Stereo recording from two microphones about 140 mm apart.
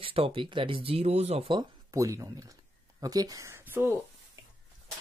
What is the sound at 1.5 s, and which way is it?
Speech, 25° right (ahead or behind).